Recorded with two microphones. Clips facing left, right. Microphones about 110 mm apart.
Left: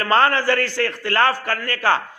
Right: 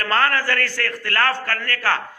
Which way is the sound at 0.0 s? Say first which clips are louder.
Left 3 dB; 20° left (ahead or behind).